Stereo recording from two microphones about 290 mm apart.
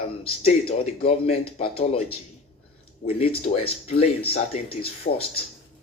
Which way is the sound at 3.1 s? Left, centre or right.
Centre.